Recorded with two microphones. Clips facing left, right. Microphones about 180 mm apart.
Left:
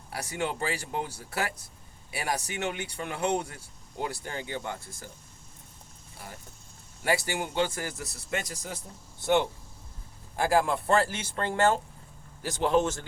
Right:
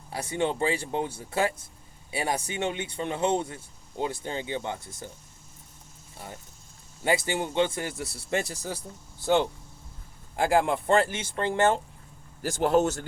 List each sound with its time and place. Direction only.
0.1 s speech: 25° right (ahead or behind)
7.0 s speech: 20° right (ahead or behind)
10.3 s speech: 20° right (ahead or behind)
12.4 s a man's voice: 45° right (ahead or behind)